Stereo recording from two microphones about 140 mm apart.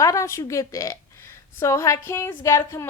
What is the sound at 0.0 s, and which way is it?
A woman's voice, 20° left (ahead or behind).